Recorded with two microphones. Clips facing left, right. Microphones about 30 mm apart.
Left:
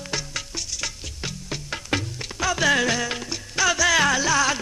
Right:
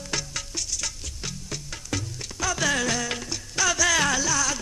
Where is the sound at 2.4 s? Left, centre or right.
Centre.